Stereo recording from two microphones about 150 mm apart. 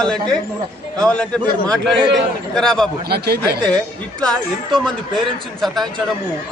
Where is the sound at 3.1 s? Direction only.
90° right.